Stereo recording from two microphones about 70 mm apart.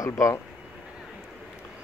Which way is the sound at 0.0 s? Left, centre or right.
Left.